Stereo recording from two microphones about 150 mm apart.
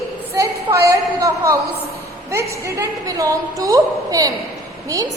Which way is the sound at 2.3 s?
20° right (ahead or behind).